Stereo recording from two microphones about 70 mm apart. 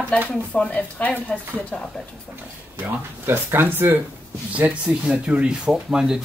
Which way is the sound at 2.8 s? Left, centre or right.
Right.